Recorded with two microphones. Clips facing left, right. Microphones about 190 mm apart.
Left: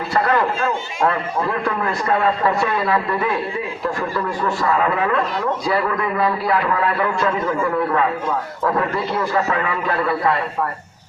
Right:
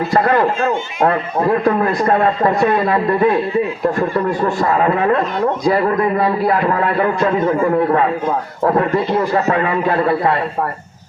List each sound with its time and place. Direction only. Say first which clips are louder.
0.1 s speech: right 3 dB; 40° right (ahead or behind)
9.1 s speech: right 2 dB; 40° right (ahead or behind)